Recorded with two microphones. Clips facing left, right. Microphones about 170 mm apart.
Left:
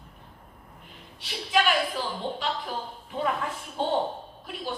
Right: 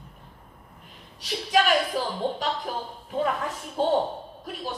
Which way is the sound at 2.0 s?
40° right (ahead or behind).